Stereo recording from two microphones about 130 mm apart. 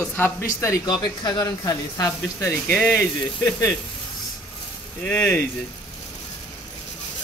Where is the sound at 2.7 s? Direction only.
10° left (ahead or behind).